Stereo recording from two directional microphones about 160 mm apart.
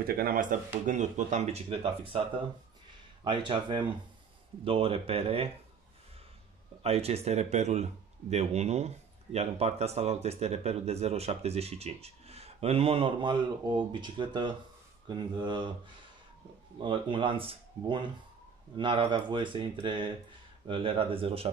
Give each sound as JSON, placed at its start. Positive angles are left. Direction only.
{"t": 0.0, "sound": "speech", "side_deg": -65}
{"t": 3.3, "sound": "a man's voice", "side_deg": -30}
{"t": 6.8, "sound": "a man's voice", "side_deg": -40}
{"t": 16.8, "sound": "a man's voice", "side_deg": -30}